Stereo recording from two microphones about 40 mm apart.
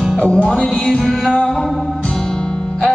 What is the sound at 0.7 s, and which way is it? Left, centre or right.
Music, left.